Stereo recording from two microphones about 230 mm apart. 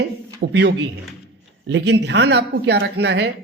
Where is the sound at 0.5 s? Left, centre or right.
Right.